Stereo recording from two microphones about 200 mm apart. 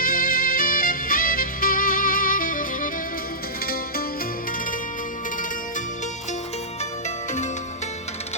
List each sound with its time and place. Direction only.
0.0 s music: 45° left (ahead or behind)